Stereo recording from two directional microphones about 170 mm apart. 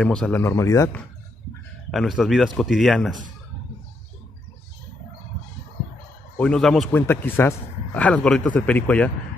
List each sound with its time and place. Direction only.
0.0 s speech: 5° left (ahead or behind)
0.4 s a man's voice: 15° left (ahead or behind)
1.9 s speech: centre (ahead or behind)
6.3 s a man's voice: 5° left (ahead or behind)